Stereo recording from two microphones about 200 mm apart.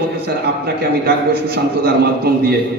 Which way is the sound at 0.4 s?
55° right (ahead or behind).